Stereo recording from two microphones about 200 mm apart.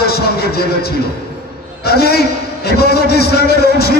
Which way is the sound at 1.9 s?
50° left (ahead or behind).